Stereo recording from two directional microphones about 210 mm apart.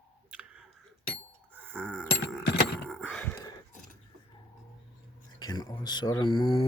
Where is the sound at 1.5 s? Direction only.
10° right (ahead or behind).